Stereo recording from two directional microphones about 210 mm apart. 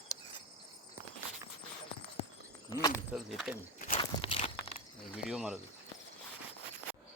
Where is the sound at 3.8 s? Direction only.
40° left (ahead or behind).